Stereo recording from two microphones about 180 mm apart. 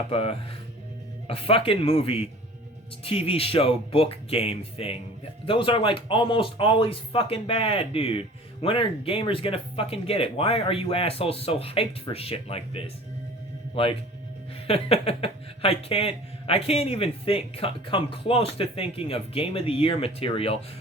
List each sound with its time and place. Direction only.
0.1 s speech: 30° left (ahead or behind)